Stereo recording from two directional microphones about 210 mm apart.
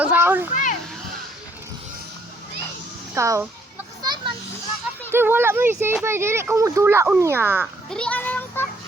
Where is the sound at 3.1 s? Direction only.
15° right (ahead or behind).